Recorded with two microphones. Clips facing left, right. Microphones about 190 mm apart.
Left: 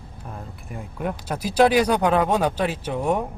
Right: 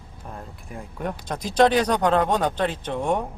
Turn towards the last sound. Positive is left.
turn(degrees=5)  # may be behind; listen again after turning